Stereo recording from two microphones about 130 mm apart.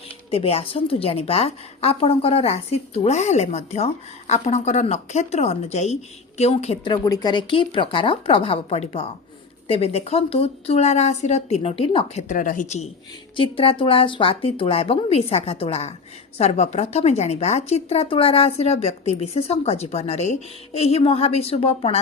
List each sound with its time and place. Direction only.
0.3 s a woman's voice: 50° left (ahead or behind)
6.8 s a woman's voice: 30° left (ahead or behind); by 12.2 s 50° left (ahead or behind)
12.3 s speech: 85° left; by 12.9 s 60° left (ahead or behind)
13.3 s a woman's voice: 45° left (ahead or behind)